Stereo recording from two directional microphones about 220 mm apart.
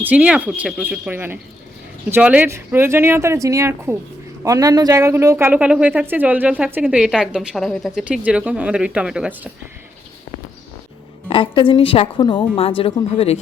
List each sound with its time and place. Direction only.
0.0 s speech: 5° right (ahead or behind)
11.3 s a woman's voice: 25° left (ahead or behind)